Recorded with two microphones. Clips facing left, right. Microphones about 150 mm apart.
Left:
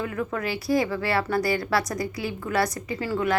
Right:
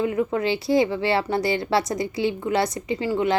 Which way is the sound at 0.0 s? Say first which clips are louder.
Right 6 dB; 20° right (ahead or behind).